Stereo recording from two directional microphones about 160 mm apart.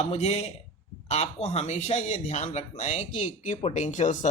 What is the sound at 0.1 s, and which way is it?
A man's voice, 40° left (ahead or behind).